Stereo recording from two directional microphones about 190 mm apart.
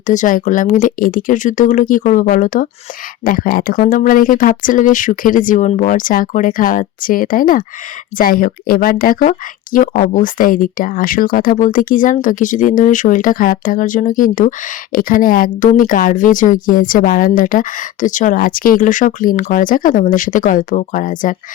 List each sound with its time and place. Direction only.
0.1 s a woman's voice: 45° left (ahead or behind)